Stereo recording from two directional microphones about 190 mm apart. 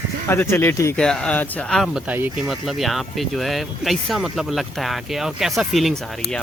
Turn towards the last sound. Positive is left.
turn(degrees=0)  # may be behind; listen again after turning